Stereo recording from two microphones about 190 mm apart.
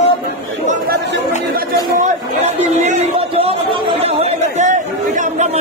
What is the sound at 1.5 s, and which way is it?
Speech, 40° right (ahead or behind).